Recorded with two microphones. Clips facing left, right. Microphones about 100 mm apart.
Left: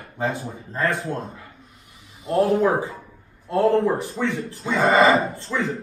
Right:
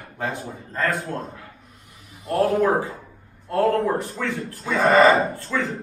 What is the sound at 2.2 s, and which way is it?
Speech, 20° left (ahead or behind).